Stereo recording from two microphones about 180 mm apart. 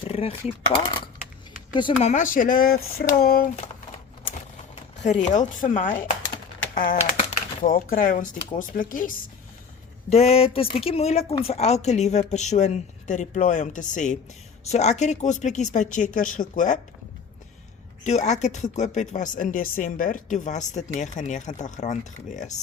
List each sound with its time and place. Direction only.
0.1 s a sound: 35° left (ahead or behind)
0.7 s speech: 30° left (ahead or behind)
2.0 s speech: 45° left (ahead or behind)
5.0 s speech: 40° left (ahead or behind)
7.2 s a sound: 40° left (ahead or behind)
7.7 s speech: 55° left (ahead or behind)
10.1 s speech: 35° left (ahead or behind)
18.0 s speech: 40° left (ahead or behind)